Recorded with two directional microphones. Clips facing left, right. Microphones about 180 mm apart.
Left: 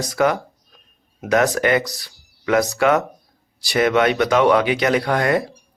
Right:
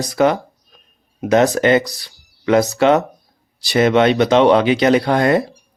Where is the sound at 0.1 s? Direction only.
25° right (ahead or behind).